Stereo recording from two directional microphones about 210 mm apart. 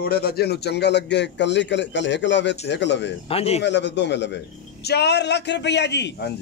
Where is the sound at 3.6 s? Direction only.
55° left (ahead or behind).